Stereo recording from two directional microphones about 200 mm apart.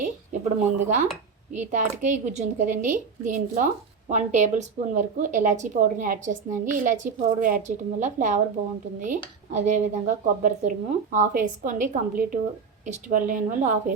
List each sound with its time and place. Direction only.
0.0 s speech: 40° right (ahead or behind)